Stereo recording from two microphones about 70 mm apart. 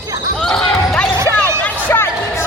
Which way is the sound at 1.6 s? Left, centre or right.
Left.